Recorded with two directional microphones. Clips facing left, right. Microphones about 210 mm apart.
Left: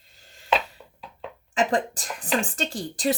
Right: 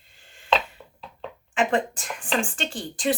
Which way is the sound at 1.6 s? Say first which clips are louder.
Even; 35° left (ahead or behind).